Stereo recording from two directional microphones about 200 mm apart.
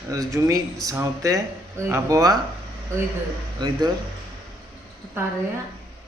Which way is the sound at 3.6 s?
20° right (ahead or behind).